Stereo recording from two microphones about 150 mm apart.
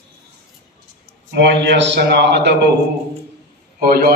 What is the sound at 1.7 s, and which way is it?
Speech, 90° right.